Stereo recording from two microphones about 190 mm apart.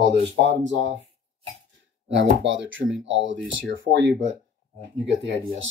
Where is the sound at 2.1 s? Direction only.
75° right (ahead or behind).